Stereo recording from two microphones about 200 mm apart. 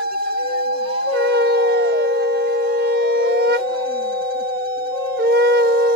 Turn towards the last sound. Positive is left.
turn(degrees=-55)  # may be behind; listen again after turning